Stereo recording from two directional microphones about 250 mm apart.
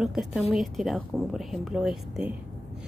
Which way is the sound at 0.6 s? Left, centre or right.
Centre.